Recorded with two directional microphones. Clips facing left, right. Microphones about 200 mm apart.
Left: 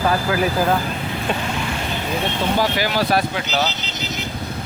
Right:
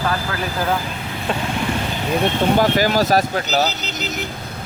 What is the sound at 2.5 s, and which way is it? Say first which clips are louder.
Speech: right 3 dB; 45° right (ahead or behind).